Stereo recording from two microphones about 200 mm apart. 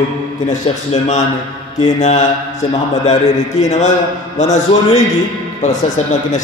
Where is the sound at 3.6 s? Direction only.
35° left (ahead or behind).